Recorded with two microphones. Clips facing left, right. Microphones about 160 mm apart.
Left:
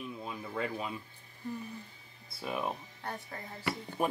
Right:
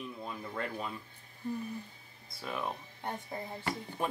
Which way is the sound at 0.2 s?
5° left (ahead or behind).